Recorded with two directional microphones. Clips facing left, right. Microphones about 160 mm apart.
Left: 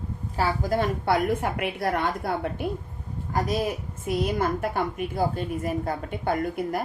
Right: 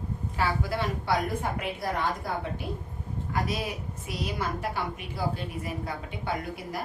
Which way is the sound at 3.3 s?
45° left (ahead or behind).